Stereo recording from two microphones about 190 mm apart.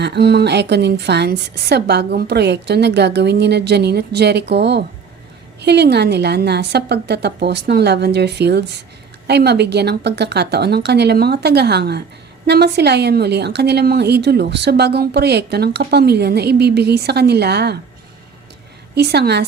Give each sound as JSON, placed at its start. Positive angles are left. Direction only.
{"t": 0.0, "sound": "a woman's voice", "side_deg": -60}
{"t": 18.9, "sound": "a woman's voice", "side_deg": -60}